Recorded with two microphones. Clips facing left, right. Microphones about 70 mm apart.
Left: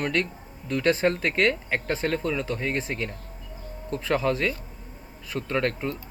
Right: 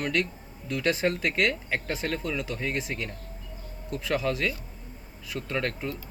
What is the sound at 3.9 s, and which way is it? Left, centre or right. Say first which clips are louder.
Speech: left 3 dB; left.